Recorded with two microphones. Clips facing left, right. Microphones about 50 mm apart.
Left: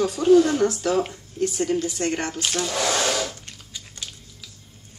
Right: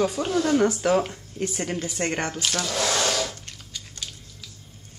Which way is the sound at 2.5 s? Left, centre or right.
Centre.